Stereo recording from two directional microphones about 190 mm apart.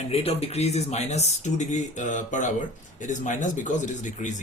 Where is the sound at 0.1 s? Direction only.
30° left (ahead or behind).